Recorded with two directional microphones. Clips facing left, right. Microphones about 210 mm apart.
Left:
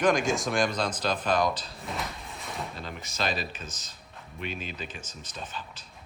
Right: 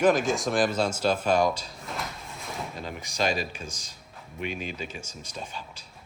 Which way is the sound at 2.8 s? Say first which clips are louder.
Right 5 dB; 15° right (ahead or behind).